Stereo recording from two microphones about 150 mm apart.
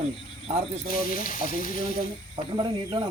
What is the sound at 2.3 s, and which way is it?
Speech, 30° right (ahead or behind).